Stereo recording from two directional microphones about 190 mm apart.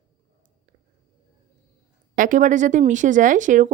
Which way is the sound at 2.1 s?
45° right (ahead or behind).